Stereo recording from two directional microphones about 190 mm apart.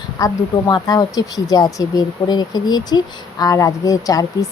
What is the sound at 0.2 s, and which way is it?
Speech, 20° left (ahead or behind).